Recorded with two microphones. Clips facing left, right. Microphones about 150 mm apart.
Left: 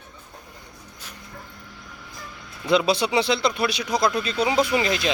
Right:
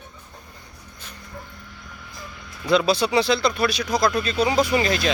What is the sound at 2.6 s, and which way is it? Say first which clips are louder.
Speech: right 1 dB; 20° left (ahead or behind).